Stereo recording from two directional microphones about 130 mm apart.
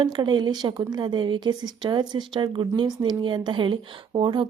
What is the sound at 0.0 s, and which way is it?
A woman's voice, 35° right (ahead or behind).